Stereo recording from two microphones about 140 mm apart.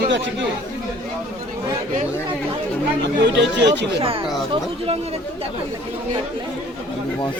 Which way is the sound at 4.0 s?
40° right (ahead or behind).